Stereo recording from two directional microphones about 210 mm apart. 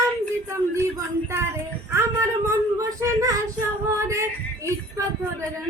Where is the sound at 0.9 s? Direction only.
10° right (ahead or behind).